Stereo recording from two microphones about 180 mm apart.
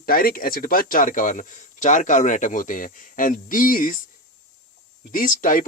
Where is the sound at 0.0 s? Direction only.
55° left (ahead or behind).